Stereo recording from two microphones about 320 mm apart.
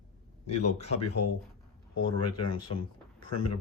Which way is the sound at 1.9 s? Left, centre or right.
Left.